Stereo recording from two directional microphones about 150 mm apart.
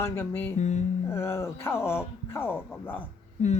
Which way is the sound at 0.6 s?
50° left (ahead or behind).